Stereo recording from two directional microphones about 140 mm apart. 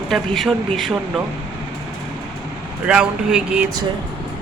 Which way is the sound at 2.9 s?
5° right (ahead or behind).